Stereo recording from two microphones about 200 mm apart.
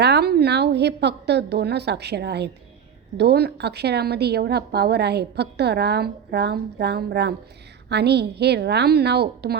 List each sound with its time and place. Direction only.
0.0 s a woman's voice: 55° right (ahead or behind)